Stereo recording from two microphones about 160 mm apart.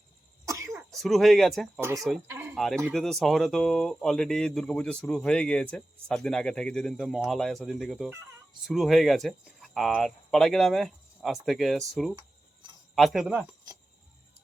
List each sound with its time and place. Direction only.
0.4 s cough: 20° right (ahead or behind)
0.8 s speech: centre (ahead or behind)
2.3 s a sound: 15° right (ahead or behind)
2.6 s speech: centre (ahead or behind)